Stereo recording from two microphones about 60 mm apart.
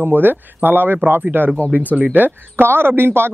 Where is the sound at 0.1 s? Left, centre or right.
Right.